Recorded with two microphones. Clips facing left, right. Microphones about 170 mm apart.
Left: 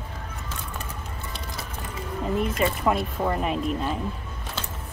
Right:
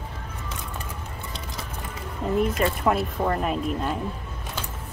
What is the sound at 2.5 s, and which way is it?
Speech, centre (ahead or behind).